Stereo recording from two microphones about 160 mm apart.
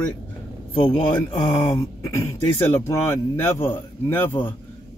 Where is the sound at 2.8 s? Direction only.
15° left (ahead or behind).